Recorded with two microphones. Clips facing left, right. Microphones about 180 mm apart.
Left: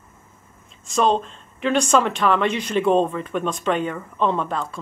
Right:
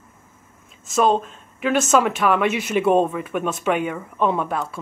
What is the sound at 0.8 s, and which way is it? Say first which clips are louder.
Speech: right 1 dB; 5° right (ahead or behind).